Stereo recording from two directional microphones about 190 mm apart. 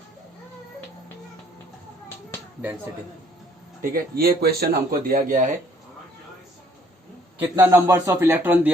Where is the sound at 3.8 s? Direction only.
50° right (ahead or behind).